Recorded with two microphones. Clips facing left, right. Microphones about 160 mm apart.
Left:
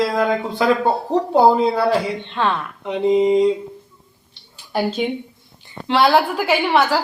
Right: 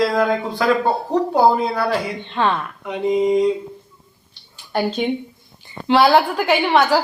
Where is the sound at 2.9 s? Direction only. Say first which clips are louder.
Left 3 dB; 25° left (ahead or behind).